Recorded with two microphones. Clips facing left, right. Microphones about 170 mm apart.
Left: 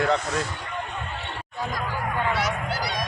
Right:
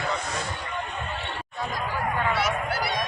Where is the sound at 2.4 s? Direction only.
25° right (ahead or behind).